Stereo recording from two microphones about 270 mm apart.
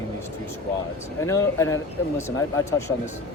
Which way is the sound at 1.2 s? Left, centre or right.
Centre.